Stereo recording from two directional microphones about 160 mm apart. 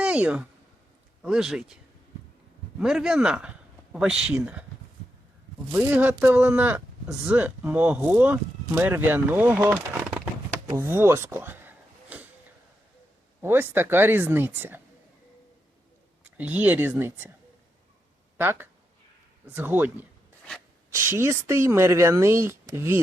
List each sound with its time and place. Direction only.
0.0 s speech: 5° right (ahead or behind)
5.7 s speech: 10° right (ahead or behind)
10.8 s a sound: 15° right (ahead or behind)
13.4 s speech: 15° right (ahead or behind)
16.4 s speech: 10° right (ahead or behind)
18.3 s speech: 15° right (ahead or behind)